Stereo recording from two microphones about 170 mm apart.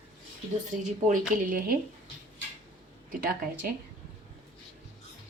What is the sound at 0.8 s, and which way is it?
Speech, 50° right (ahead or behind).